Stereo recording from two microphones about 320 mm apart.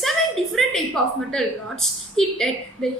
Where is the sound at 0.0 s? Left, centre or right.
Centre.